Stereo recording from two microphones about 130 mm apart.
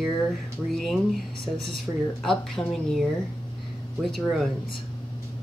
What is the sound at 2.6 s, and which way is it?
Speech, 25° left (ahead or behind).